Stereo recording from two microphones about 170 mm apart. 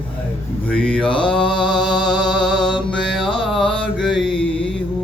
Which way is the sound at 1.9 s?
25° left (ahead or behind).